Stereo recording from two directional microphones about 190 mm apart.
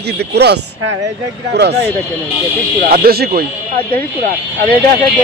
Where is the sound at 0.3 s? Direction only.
60° right (ahead or behind).